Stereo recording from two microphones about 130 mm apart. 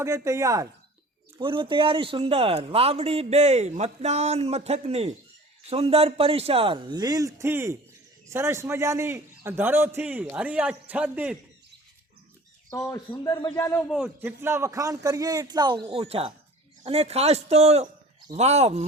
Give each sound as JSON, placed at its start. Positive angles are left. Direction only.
{"t": 0.0, "sound": "a man's voice", "side_deg": -20}
{"t": 1.4, "sound": "a man's voice", "side_deg": -40}
{"t": 12.7, "sound": "speech", "side_deg": 20}
{"t": 14.2, "sound": "a man's voice", "side_deg": -20}